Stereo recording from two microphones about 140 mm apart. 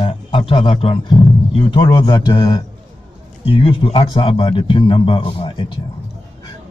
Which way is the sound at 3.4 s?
40° left (ahead or behind).